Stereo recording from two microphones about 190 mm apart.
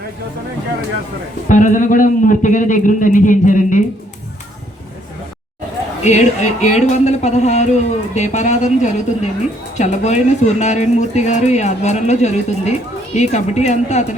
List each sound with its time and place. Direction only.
1.5 s a man's voice: 40° left (ahead or behind)
6.0 s a woman's voice: 35° left (ahead or behind)